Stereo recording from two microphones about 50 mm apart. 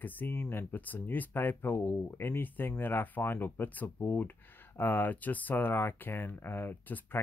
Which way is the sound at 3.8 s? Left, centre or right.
Left.